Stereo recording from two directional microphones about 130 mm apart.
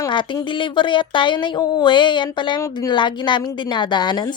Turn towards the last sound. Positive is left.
turn(degrees=35)  # may be behind; listen again after turning